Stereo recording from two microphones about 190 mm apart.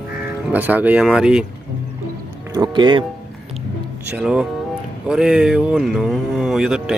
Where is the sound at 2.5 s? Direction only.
20° right (ahead or behind).